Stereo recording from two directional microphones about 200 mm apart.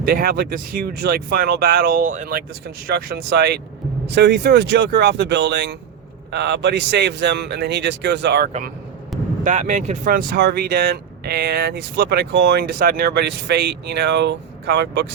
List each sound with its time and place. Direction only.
0.0 s speech: 50° right (ahead or behind)
2.8 s a man's voice: 50° right (ahead or behind)
9.4 s speech: 40° right (ahead or behind); by 15.0 s 55° right (ahead or behind)